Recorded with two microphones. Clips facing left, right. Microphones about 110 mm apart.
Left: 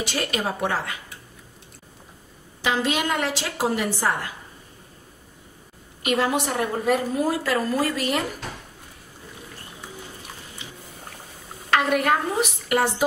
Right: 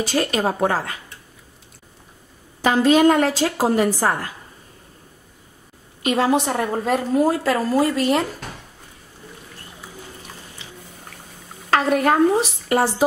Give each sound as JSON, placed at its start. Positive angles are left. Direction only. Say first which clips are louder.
{"t": 0.0, "sound": "a woman's voice", "louder": "right 6 dB", "side_deg": -40}
{"t": 2.6, "sound": "a woman's voice", "louder": "right 9 dB", "side_deg": -40}
{"t": 6.0, "sound": "a woman's voice", "louder": "right 4 dB", "side_deg": -30}
{"t": 11.7, "sound": "a woman's voice", "louder": "right 3 dB", "side_deg": -35}